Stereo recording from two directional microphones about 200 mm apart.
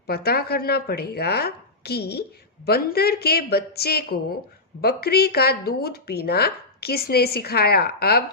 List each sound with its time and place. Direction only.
0.1 s speech: 50° left (ahead or behind)